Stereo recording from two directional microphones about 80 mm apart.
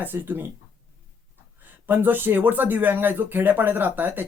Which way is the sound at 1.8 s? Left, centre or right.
Right.